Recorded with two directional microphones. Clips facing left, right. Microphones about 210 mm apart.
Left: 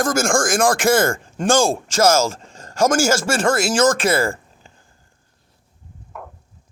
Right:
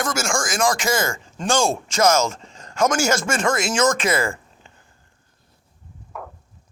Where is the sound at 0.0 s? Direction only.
50° left (ahead or behind).